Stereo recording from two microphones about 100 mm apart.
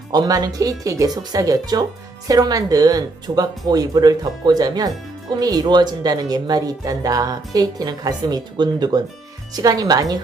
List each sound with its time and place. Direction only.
0.1 s speech: 40° right (ahead or behind)